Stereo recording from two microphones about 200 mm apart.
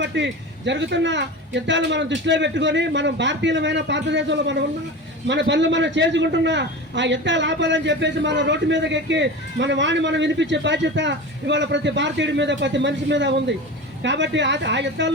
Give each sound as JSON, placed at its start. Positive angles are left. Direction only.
{"t": 0.0, "sound": "a man's voice", "side_deg": -65}